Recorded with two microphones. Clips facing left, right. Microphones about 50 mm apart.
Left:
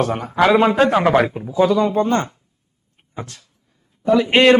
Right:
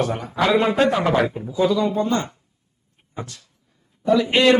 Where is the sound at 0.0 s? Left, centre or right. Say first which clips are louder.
Left 3 dB; left.